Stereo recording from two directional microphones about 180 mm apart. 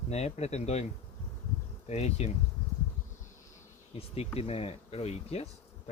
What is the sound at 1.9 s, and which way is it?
Speech, 35° left (ahead or behind).